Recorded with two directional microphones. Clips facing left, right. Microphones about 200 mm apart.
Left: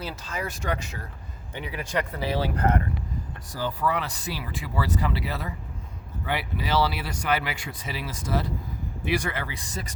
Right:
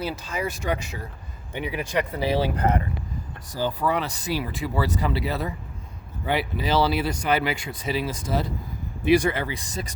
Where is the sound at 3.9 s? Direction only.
20° right (ahead or behind).